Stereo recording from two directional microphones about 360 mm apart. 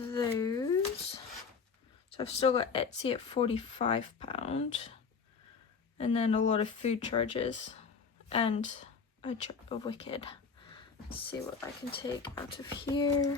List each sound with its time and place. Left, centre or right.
0.1 s a sound: centre
2.1 s speech: centre
6.0 s speech: centre